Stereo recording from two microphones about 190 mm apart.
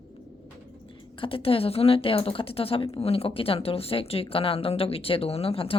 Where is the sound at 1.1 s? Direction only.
30° left (ahead or behind).